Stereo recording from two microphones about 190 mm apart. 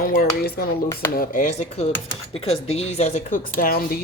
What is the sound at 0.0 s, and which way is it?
Speech, 50° left (ahead or behind).